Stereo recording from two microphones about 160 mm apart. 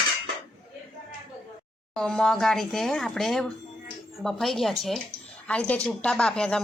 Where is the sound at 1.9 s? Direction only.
5° left (ahead or behind).